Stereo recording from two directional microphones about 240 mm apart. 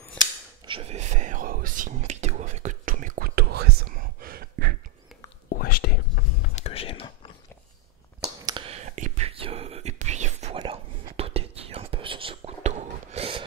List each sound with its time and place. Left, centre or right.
0.7 s whispering: right
5.6 s whispering: left
8.5 s whispering: right